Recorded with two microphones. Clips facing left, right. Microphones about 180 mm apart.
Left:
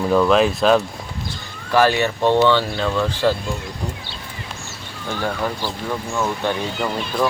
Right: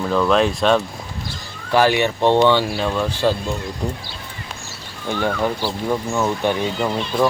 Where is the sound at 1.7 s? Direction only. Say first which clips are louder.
Even; 15° right (ahead or behind).